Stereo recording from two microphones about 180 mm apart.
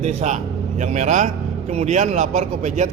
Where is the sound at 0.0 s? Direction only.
40° right (ahead or behind).